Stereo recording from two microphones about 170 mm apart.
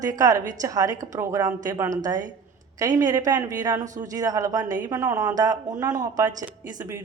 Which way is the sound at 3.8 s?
45° right (ahead or behind).